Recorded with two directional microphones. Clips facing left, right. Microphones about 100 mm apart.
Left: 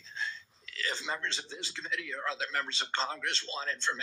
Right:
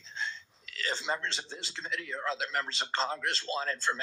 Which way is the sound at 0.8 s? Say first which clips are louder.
Right 2 dB; 30° right (ahead or behind).